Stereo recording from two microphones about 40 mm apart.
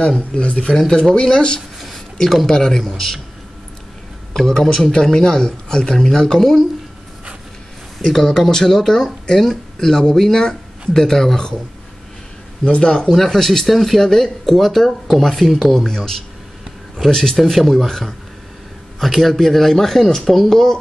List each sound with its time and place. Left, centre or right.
0.0 s speech: centre
0.7 s speech: centre
1.8 s a sound: centre
2.2 s speech: centre
4.3 s speech: centre
8.1 s speech: centre
12.6 s speech: left
13.1 s speech: centre
17.1 s speech: centre